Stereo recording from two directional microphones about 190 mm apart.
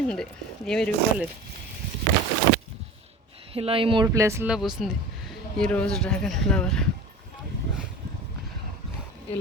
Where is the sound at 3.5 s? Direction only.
30° right (ahead or behind).